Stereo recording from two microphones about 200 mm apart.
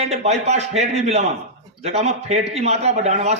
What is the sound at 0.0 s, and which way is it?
A man's voice, 35° right (ahead or behind).